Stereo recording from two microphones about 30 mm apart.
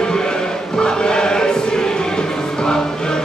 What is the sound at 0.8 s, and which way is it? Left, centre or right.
Choir, left.